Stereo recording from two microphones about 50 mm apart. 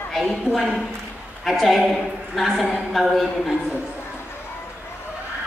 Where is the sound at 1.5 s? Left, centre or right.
Centre.